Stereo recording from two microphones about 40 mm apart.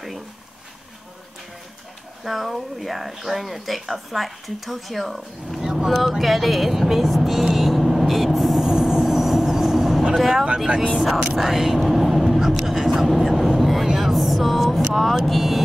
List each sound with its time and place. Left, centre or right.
2.2 s speech: centre
7.5 s vehicle: centre
8.6 s vehicle: centre
10.1 s speech: centre
10.7 s speech: right
11.3 s vehicle: centre
13.8 s speech: centre